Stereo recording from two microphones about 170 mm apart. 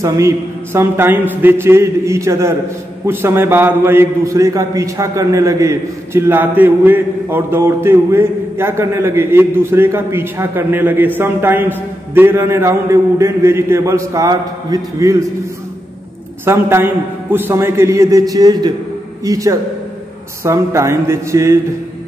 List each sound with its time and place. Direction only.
0.0 s a man's voice: 15° right (ahead or behind)
16.4 s a man's voice: 15° right (ahead or behind)